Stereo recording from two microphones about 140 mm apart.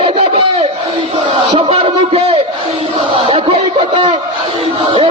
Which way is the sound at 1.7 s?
45° right (ahead or behind).